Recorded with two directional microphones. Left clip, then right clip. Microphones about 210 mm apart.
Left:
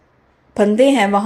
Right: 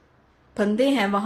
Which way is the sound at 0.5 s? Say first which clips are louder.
Left 9 dB; 20° left (ahead or behind).